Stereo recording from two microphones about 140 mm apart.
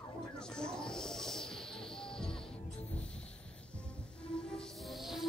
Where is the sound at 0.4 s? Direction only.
5° left (ahead or behind).